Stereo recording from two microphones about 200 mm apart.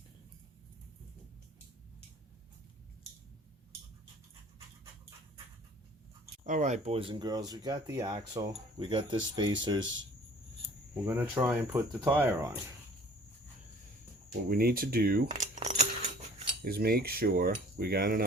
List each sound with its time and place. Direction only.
6.4 s speech: 35° right (ahead or behind); by 10.0 s 20° right (ahead or behind)
11.0 s speech: 10° right (ahead or behind)
14.4 s speech: 50° right (ahead or behind)
15.3 s coin: 35° right (ahead or behind)
16.6 s speech: 50° right (ahead or behind)